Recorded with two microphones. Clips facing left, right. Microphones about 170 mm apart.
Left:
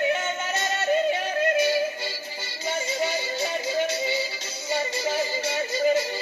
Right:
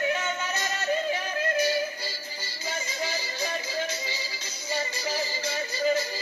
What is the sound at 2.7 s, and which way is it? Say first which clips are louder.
Music: left 6 dB; 25° left (ahead or behind).